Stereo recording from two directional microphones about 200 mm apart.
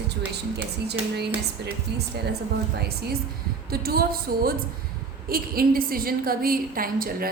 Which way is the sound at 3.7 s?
50° right (ahead or behind).